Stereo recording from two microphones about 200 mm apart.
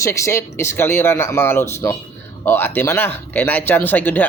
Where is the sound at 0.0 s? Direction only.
15° left (ahead or behind).